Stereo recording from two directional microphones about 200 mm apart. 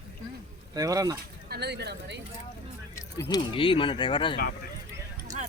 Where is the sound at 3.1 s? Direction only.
20° left (ahead or behind).